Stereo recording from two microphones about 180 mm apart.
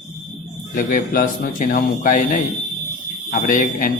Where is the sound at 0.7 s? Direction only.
50° left (ahead or behind).